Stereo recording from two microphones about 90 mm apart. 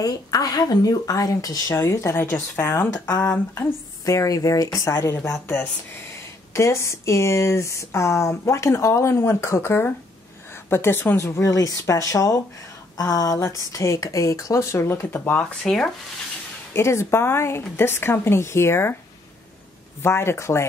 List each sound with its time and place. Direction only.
0.0 s speech: 45° left (ahead or behind); by 2.9 s 25° left (ahead or behind)
3.5 s speech: 40° left (ahead or behind); by 15.9 s 10° left (ahead or behind)
16.7 s speech: 30° left (ahead or behind)
20.0 s speech: 30° left (ahead or behind)